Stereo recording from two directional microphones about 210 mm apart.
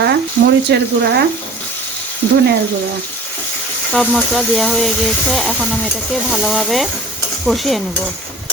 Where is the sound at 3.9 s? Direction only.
Centre (ahead or behind).